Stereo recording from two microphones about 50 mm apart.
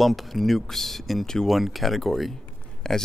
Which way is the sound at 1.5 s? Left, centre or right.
Centre.